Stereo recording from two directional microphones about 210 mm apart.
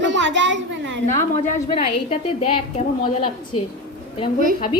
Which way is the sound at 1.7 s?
30° left (ahead or behind).